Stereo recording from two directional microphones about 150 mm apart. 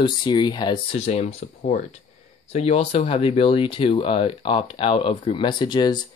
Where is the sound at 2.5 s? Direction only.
45° left (ahead or behind).